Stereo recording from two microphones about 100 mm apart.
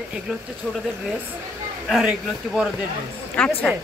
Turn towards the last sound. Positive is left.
turn(degrees=15)  # may be behind; listen again after turning